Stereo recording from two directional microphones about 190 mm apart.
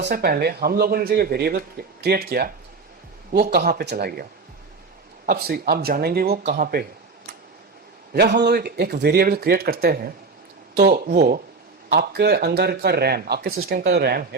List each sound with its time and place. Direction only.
0.0 s speech: 55° right (ahead or behind)
8.1 s speech: 60° right (ahead or behind)